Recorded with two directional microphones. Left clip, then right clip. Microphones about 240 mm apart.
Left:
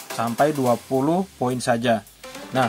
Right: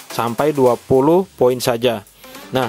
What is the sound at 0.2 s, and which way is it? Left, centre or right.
Speech, right.